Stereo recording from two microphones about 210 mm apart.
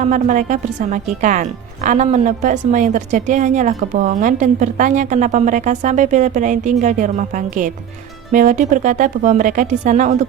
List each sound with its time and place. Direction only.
0.1 s a woman's voice: 40° right (ahead or behind)